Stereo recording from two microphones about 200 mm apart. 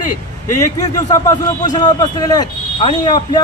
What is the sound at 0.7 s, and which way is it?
A man's voice, 20° left (ahead or behind).